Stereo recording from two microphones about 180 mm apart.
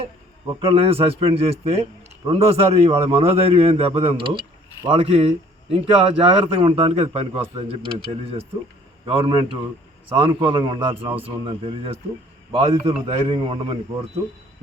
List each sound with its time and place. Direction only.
0.7 s a man's voice: 30° right (ahead or behind)